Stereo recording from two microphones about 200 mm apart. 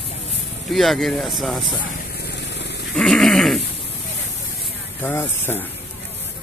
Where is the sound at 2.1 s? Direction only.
55° left (ahead or behind).